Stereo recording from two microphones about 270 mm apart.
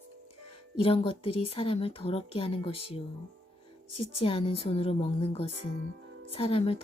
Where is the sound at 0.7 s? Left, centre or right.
Left.